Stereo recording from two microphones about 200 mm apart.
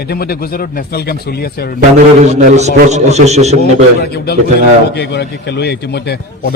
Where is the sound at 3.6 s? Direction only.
50° left (ahead or behind).